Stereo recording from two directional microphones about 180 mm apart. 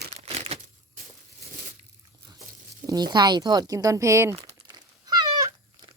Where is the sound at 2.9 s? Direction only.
25° right (ahead or behind).